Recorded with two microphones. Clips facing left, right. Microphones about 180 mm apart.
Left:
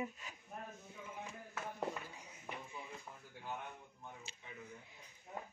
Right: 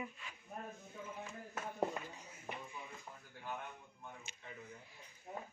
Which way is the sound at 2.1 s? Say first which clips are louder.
Right 1 dB; 15° left (ahead or behind).